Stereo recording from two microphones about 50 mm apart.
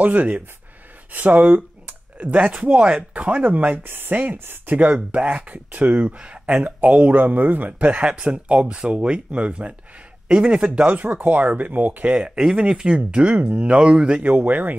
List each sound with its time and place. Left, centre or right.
0.0 s speech: right
1.1 s a sound: right
2.3 s speech: right
12.2 s speech: centre; by 14.8 s right